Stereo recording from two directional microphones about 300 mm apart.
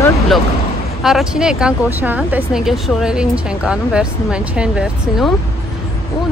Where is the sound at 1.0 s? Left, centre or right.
Centre.